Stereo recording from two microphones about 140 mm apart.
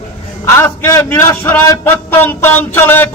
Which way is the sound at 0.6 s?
20° left (ahead or behind).